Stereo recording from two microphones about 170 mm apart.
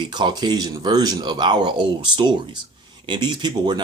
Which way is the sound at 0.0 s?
25° right (ahead or behind).